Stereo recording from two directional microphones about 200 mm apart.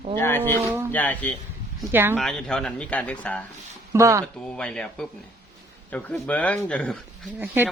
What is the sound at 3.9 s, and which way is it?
Speech, 15° right (ahead or behind).